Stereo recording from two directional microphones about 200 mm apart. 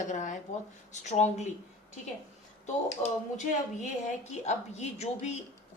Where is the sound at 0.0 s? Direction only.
40° left (ahead or behind).